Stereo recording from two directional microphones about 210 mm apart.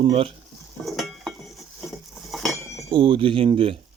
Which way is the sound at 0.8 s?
Centre (ahead or behind).